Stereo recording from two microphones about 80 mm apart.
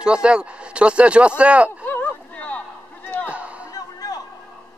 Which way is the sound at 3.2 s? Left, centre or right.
Centre.